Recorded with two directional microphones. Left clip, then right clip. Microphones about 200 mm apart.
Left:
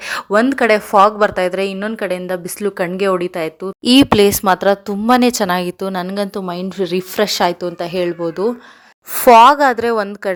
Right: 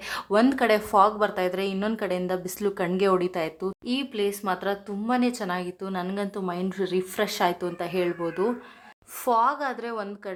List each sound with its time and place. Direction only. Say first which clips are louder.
0.0 s a sound: left 9 dB; 25° left (ahead or behind)
0.5 s a woman's voice: left 9 dB; 25° left (ahead or behind)
3.8 s speech: left 19 dB; 55° left (ahead or behind); by 8.5 s 25° left (ahead or behind)
9.1 s speech: left 16 dB; 40° left (ahead or behind)